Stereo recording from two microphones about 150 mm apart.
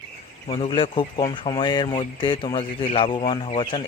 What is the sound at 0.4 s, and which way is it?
Speech, 35° left (ahead or behind).